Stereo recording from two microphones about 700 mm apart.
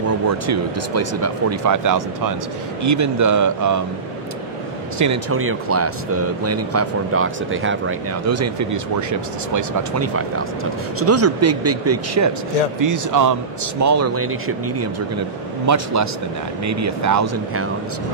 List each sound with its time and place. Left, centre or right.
0.5 s speech: right
4.9 s speech: right
15.6 s speech: right